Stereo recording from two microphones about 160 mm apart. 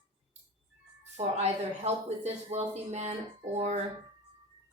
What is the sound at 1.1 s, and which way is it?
Speech, 45° right (ahead or behind).